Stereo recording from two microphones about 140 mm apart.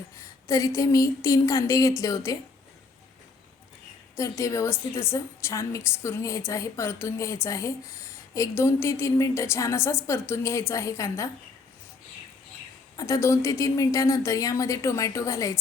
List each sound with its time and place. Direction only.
0.2 s a woman's voice: 25° left (ahead or behind)
4.2 s a woman's voice: 20° left (ahead or behind)
13.0 s a woman's voice: 20° left (ahead or behind)